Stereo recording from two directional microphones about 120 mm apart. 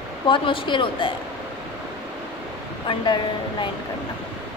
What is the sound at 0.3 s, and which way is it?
Speech, 45° left (ahead or behind).